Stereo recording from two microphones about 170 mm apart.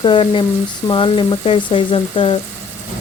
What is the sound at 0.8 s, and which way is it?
Speech, 30° left (ahead or behind).